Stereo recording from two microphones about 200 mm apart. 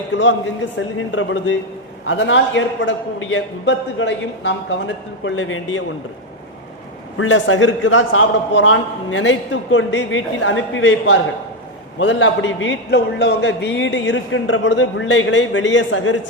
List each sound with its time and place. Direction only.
0.9 s a man's voice: 75° left (ahead or behind)
2.0 s a man's voice: 65° left (ahead or behind)
7.2 s a man's voice: 70° left (ahead or behind)